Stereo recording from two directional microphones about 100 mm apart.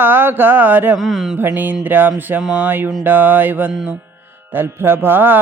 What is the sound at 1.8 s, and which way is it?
Music, 20° right (ahead or behind).